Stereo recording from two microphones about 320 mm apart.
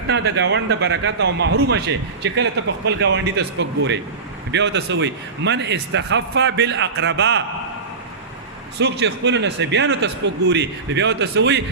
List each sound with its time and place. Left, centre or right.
0.1 s a man's voice: right
8.8 s a man's voice: right